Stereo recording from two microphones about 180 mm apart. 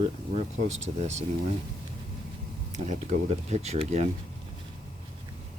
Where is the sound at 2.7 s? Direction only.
40° right (ahead or behind).